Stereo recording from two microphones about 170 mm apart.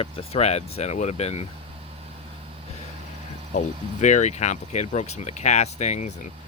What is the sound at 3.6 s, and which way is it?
Speech, 45° left (ahead or behind).